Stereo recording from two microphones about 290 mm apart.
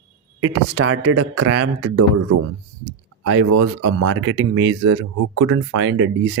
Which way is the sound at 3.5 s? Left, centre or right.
Right.